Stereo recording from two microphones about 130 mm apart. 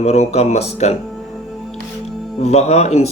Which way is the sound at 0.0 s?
55° left (ahead or behind).